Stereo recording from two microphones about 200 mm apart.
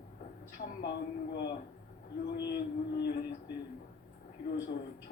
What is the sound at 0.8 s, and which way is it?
A woman's voice, 55° left (ahead or behind).